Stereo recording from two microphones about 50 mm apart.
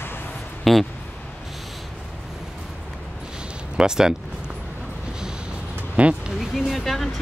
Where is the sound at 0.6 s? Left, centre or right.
Centre.